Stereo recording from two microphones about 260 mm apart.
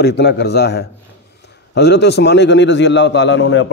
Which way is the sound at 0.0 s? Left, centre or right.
Left.